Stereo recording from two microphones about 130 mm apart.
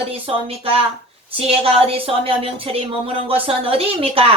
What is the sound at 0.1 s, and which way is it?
Speech, 45° right (ahead or behind).